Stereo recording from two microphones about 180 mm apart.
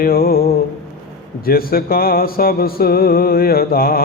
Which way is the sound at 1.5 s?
55° left (ahead or behind).